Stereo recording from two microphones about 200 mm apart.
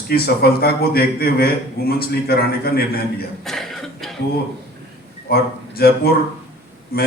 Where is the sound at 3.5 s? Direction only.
Centre (ahead or behind).